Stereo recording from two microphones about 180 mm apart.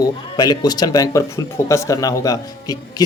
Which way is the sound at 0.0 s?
20° left (ahead or behind).